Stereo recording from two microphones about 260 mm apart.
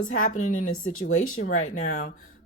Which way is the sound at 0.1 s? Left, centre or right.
Left.